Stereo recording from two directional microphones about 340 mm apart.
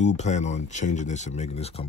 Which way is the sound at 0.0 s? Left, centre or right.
Centre.